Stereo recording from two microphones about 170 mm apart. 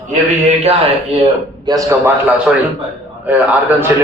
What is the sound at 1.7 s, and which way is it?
A man's voice, 15° right (ahead or behind).